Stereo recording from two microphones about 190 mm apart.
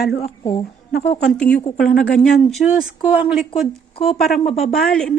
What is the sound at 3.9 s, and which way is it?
Speech, 30° left (ahead or behind).